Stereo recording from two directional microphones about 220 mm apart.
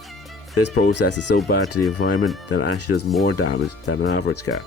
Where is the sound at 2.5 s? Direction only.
90° left.